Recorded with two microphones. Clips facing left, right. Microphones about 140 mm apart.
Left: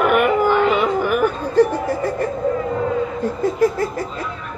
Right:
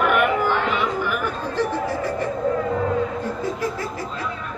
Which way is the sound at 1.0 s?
50° left (ahead or behind).